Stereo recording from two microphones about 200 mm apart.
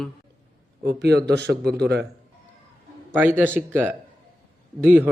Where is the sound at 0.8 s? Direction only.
55° right (ahead or behind).